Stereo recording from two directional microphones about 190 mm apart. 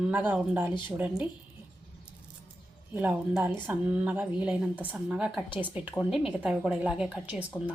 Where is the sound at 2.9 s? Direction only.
10° right (ahead or behind).